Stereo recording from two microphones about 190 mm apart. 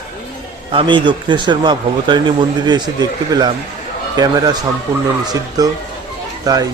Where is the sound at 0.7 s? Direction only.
25° right (ahead or behind).